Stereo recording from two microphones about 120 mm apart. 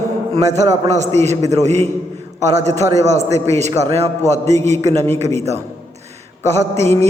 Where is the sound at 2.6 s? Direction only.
65° right (ahead or behind).